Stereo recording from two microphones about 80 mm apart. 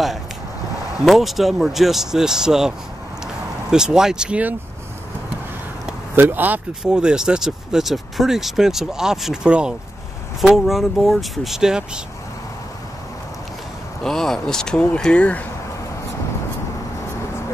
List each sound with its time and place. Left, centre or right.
1.0 s speech: centre
3.7 s speech: centre
6.1 s speech: right
6.8 s speech: centre
14.0 s speech: centre